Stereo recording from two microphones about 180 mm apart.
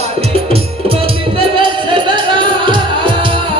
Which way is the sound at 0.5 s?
30° right (ahead or behind).